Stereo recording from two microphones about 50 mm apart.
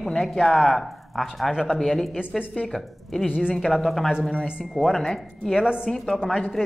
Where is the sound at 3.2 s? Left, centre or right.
Centre.